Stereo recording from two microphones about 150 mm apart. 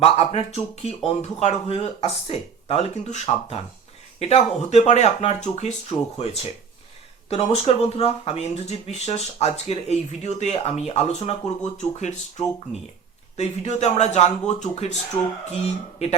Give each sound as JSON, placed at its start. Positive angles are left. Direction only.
{"t": 0.0, "sound": "speech", "side_deg": 40}
{"t": 13.3, "sound": "speech", "side_deg": 45}